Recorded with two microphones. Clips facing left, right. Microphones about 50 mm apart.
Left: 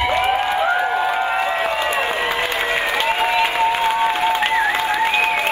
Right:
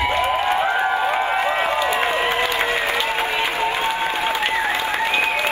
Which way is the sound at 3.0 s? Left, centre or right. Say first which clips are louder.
Left 4 dB; left.